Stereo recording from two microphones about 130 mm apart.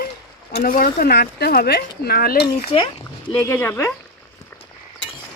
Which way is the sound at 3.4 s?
15° left (ahead or behind).